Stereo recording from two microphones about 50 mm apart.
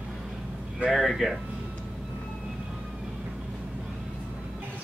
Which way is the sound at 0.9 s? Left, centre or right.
Centre.